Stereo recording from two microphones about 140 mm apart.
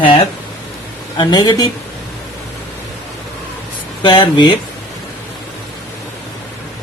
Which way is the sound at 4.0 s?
35° left (ahead or behind).